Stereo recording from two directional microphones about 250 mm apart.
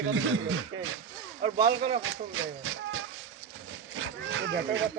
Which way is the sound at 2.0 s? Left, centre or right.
Right.